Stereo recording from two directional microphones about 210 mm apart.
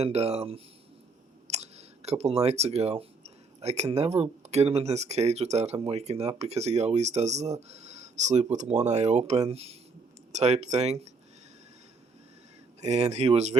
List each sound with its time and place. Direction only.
0.0 s speech: 30° right (ahead or behind)
12.8 s speech: 30° right (ahead or behind)